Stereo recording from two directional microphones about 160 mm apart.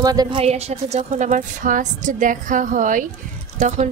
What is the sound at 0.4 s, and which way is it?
A woman's voice, 40° right (ahead or behind).